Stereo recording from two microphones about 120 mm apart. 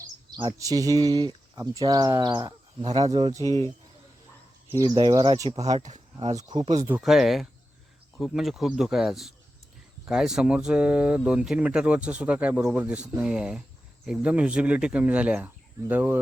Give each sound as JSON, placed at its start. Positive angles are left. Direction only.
{"t": 0.3, "sound": "speech", "side_deg": -35}
{"t": 3.4, "sound": "speech", "side_deg": 30}
{"t": 4.8, "sound": "speech", "side_deg": -35}
{"t": 5.7, "sound": "speech", "side_deg": -80}
{"t": 6.3, "sound": "speech", "side_deg": -35}
{"t": 7.0, "sound": "speech", "side_deg": 0}